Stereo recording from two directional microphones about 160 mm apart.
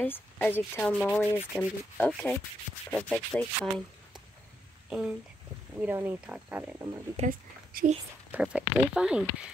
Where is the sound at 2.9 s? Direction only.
5° left (ahead or behind).